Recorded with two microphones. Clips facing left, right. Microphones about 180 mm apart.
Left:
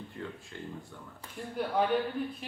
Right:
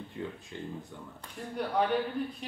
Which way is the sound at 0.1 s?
15° right (ahead or behind).